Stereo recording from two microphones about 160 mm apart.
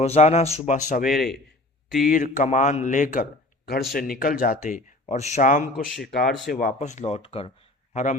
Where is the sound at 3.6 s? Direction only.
75° left (ahead or behind).